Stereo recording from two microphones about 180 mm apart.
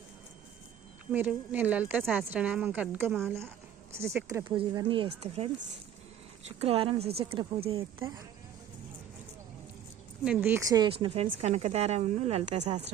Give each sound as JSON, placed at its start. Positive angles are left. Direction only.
{"t": 1.1, "sound": "a woman's voice", "side_deg": -10}
{"t": 4.4, "sound": "speech", "side_deg": -25}
{"t": 6.6, "sound": "speech", "side_deg": -30}
{"t": 10.2, "sound": "speech", "side_deg": -10}